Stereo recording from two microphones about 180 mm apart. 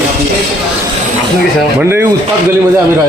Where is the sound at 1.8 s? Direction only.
15° right (ahead or behind).